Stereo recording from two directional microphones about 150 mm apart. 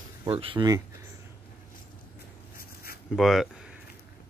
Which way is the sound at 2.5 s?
90° left.